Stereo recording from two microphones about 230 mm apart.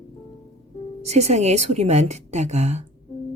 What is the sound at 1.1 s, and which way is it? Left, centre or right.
Speech, right.